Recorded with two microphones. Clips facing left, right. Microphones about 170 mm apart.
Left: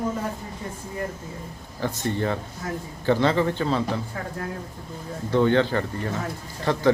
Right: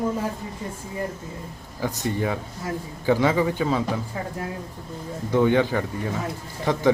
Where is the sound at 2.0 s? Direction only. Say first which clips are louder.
Even; 10° right (ahead or behind).